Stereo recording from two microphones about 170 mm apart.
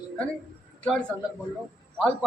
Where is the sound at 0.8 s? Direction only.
5° left (ahead or behind).